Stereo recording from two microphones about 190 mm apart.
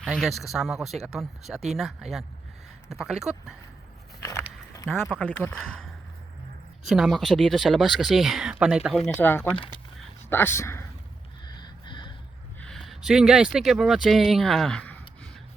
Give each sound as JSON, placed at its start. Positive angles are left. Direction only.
{"t": 0.0, "sound": "speech", "side_deg": 0}
{"t": 4.2, "sound": "biting", "side_deg": 15}
{"t": 4.9, "sound": "speech", "side_deg": 0}
{"t": 6.8, "sound": "speech", "side_deg": 0}
{"t": 9.0, "sound": "speech", "side_deg": 10}
{"t": 11.4, "sound": "snort", "side_deg": 25}
{"t": 12.5, "sound": "speech", "side_deg": 5}